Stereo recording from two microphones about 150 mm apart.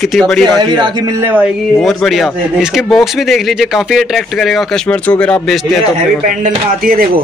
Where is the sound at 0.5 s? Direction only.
30° right (ahead or behind).